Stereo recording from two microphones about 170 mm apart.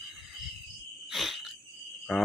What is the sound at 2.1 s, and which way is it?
Speech, centre (ahead or behind).